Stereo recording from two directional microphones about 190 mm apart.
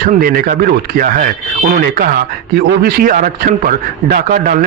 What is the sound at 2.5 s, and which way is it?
A man's voice, 55° right (ahead or behind).